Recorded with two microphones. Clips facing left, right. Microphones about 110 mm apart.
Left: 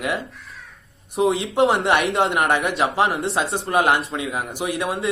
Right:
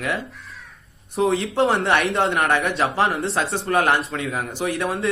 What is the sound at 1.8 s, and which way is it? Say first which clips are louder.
Speech: left 1 dB; 15° left (ahead or behind).